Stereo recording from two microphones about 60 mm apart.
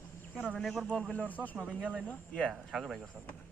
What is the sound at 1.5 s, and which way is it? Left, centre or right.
A man's voice, centre.